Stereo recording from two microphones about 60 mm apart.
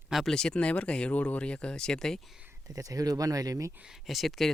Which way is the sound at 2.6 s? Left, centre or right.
Right.